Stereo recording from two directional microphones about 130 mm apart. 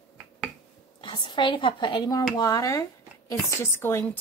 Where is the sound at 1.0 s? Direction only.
40° left (ahead or behind); by 4.0 s 20° left (ahead or behind).